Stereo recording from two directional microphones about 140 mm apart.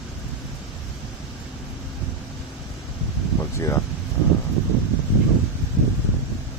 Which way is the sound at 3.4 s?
20° left (ahead or behind).